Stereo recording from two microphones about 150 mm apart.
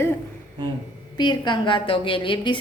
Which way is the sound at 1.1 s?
30° left (ahead or behind).